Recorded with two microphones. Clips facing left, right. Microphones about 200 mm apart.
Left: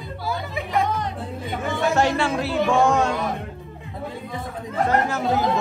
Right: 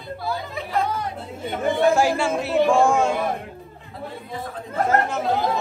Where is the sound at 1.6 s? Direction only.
55° right (ahead or behind).